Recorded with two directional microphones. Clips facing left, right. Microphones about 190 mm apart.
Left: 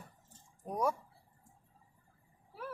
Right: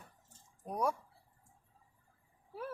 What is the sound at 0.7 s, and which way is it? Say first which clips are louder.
Speech: left 1 dB; centre (ahead or behind).